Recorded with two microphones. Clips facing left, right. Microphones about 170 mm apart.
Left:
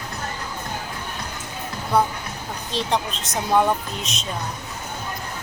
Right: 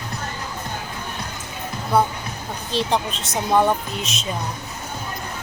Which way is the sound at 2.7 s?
Centre (ahead or behind).